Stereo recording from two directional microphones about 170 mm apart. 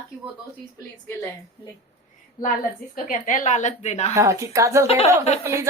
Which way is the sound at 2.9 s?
50° left (ahead or behind).